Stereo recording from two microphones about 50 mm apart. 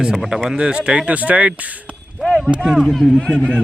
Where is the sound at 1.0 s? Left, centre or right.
Right.